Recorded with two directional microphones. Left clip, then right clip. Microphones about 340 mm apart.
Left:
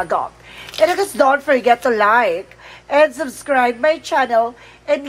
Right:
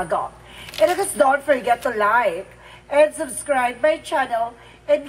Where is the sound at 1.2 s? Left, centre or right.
Left.